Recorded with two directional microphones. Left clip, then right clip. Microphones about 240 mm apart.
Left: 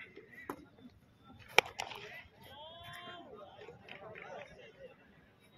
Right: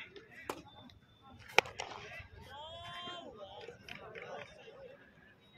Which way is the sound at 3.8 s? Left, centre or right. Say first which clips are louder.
Left 1 dB; right.